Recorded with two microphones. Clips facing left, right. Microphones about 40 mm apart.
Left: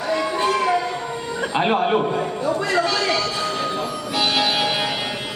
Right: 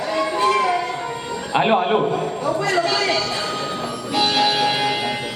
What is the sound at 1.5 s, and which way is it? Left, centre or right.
Speech, centre.